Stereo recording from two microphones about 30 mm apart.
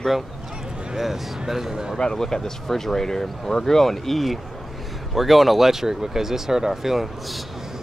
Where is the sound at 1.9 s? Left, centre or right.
Left.